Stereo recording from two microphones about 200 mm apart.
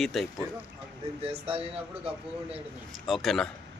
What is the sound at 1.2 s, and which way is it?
Speech, 30° right (ahead or behind).